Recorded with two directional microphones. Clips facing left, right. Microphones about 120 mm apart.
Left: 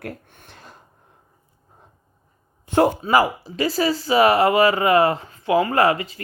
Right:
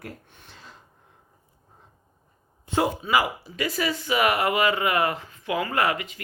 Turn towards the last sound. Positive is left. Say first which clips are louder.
# left 6 dB
turn(degrees=35)  # may be behind; listen again after turning